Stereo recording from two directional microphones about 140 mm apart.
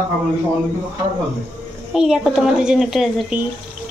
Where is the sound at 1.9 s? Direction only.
5° right (ahead or behind).